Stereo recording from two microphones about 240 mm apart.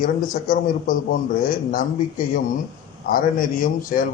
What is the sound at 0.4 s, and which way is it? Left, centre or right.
A man's voice, left.